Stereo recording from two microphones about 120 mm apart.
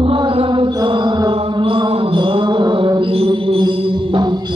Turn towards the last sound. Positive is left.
turn(degrees=-45)  # may be behind; listen again after turning